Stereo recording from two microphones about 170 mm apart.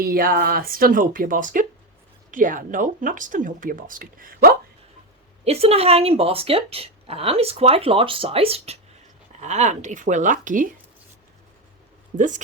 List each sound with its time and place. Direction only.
0.0 s speech: 60° right (ahead or behind)
5.5 s speech: 35° right (ahead or behind)
12.1 s speech: 50° right (ahead or behind)